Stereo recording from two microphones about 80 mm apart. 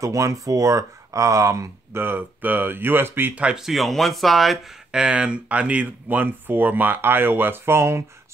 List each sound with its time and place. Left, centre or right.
0.0 s speech: right
2.0 s speech: right
3.5 s speech: centre
4.9 s speech: centre; by 8.0 s right